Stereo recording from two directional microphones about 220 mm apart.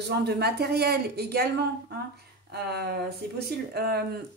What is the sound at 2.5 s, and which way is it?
Speech, 45° right (ahead or behind).